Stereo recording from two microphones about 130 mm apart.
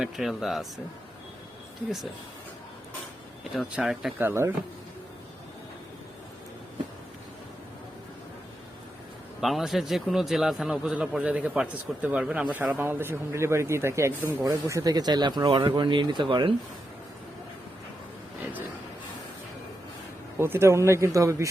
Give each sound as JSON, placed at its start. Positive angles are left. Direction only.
{"t": 0.0, "sound": "speech", "side_deg": -5}
{"t": 3.5, "sound": "speech", "side_deg": 0}
{"t": 4.2, "sound": "speech", "side_deg": -20}
{"t": 9.4, "sound": "a man's voice", "side_deg": 0}
{"t": 20.4, "sound": "speech", "side_deg": -20}